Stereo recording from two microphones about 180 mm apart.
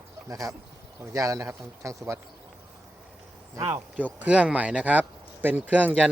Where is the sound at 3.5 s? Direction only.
15° right (ahead or behind).